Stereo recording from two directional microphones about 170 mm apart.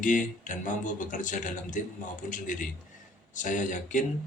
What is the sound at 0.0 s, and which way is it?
A man's voice, 50° left (ahead or behind).